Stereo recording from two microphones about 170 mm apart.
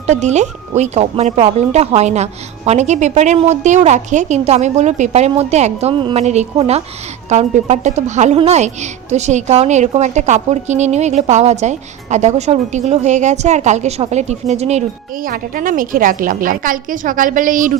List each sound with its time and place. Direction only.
0.1 s a woman's voice: 45° right (ahead or behind)
6.2 s a woman's voice: 40° right (ahead or behind)
15.2 s speech: 55° right (ahead or behind)